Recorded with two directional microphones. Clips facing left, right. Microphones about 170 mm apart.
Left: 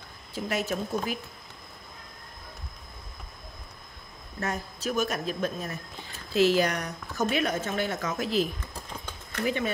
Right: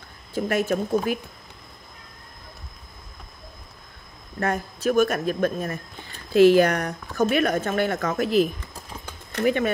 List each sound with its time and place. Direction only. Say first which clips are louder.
0.3 s speech: right 7 dB; 55° right (ahead or behind)
4.4 s speech: right 7 dB; 55° right (ahead or behind)